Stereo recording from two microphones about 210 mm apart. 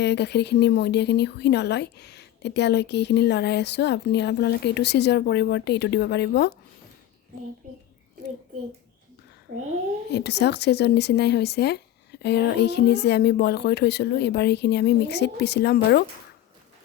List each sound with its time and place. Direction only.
0.0 s speech: 55° left (ahead or behind)
7.6 s a child's voice: 40° right (ahead or behind)
10.1 s speech: 55° left (ahead or behind)